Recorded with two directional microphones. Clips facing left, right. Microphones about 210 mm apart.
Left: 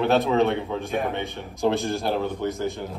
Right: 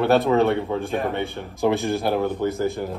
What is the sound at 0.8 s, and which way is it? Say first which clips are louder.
Speech: right 2 dB; 15° left (ahead or behind).